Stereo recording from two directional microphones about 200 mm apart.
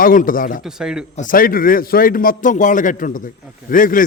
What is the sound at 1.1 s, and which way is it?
A man's voice, 40° left (ahead or behind).